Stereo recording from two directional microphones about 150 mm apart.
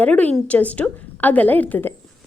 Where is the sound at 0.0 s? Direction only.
10° left (ahead or behind).